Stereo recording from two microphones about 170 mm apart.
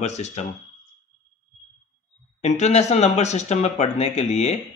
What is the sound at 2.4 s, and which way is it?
Speech, 45° left (ahead or behind).